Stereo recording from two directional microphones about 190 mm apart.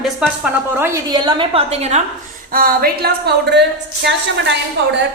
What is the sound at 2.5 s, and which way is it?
A woman's voice, 50° right (ahead or behind).